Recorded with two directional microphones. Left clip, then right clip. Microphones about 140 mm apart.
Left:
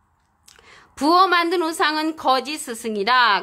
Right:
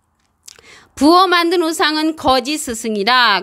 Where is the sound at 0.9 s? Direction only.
40° right (ahead or behind).